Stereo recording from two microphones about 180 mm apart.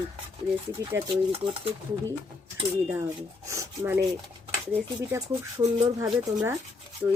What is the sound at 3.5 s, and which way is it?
Rub, 15° right (ahead or behind).